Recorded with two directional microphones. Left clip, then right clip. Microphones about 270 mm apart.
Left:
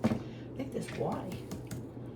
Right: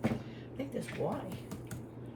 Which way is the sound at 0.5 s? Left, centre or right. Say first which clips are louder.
Even; centre.